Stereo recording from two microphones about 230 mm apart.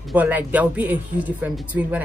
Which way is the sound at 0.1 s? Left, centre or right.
Centre.